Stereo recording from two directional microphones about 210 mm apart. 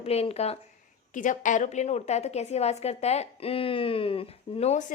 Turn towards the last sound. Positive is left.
turn(degrees=30)  # may be behind; listen again after turning